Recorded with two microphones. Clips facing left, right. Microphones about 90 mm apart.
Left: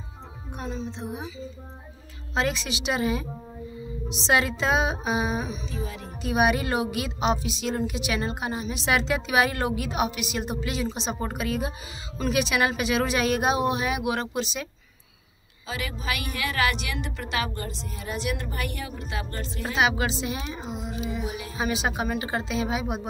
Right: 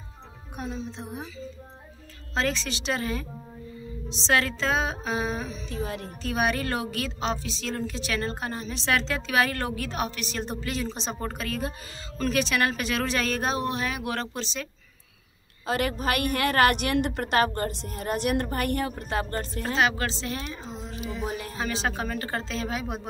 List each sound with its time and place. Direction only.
0.6 s a woman's voice: 5° right (ahead or behind)
2.3 s a woman's voice: 10° left (ahead or behind)
5.7 s a woman's voice: 55° right (ahead or behind)
6.2 s a woman's voice: 15° left (ahead or behind)
15.6 s a woman's voice: 55° right (ahead or behind)
19.6 s a woman's voice: 10° left (ahead or behind)
21.3 s music: 45° right (ahead or behind)
21.5 s a woman's voice: 15° left (ahead or behind)